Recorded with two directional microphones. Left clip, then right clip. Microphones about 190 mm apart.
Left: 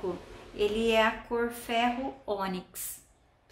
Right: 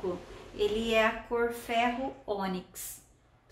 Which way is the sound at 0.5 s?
30° left (ahead or behind).